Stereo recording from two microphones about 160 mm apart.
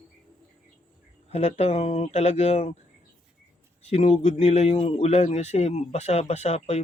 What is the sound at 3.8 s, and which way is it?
A man's voice, 45° left (ahead or behind).